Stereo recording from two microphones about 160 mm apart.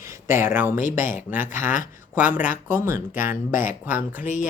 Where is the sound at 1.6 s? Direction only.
55° left (ahead or behind).